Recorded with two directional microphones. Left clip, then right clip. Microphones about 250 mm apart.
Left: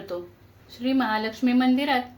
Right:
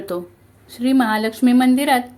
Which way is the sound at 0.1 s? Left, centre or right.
Right.